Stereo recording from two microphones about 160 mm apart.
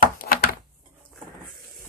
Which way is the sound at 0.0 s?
60° left (ahead or behind).